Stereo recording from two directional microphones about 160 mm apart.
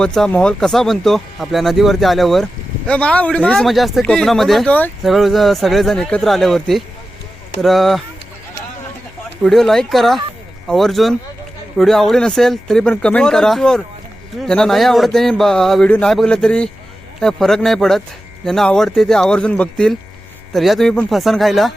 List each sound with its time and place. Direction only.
0.0 s speech: 5° left (ahead or behind)
9.4 s speech: centre (ahead or behind)